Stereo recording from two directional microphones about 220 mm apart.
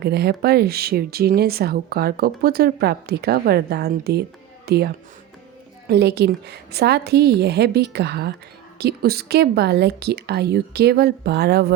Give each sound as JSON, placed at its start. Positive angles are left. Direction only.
{"t": 0.0, "sound": "speech", "side_deg": -50}
{"t": 5.9, "sound": "speech", "side_deg": -50}